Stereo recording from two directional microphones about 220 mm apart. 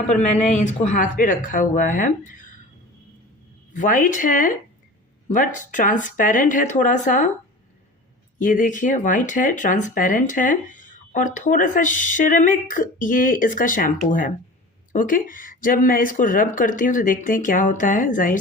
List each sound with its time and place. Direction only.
0.4 s speech: 35° left (ahead or behind)
3.8 s speech: 35° left (ahead or behind)
8.4 s speech: 35° left (ahead or behind)